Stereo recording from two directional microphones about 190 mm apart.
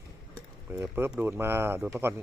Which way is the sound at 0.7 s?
10° right (ahead or behind).